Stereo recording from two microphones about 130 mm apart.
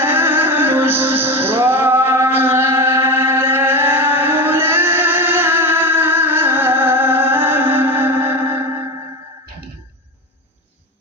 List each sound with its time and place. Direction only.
0.0 s music: 15° right (ahead or behind)